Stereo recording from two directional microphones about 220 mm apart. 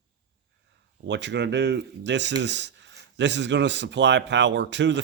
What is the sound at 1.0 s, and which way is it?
Speech, 55° right (ahead or behind).